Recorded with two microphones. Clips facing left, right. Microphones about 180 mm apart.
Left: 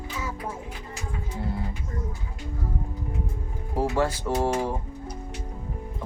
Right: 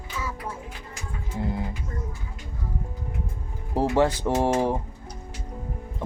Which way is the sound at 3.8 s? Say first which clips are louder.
Right 3 dB; 20° right (ahead or behind).